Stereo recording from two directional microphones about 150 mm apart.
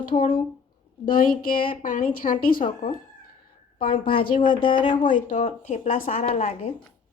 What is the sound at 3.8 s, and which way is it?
Speech, 60° left (ahead or behind).